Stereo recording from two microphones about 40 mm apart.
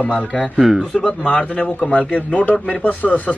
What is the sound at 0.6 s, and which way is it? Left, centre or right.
Speech, centre.